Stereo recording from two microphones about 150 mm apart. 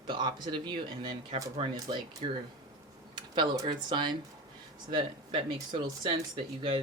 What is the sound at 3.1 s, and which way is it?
Speech, 30° right (ahead or behind).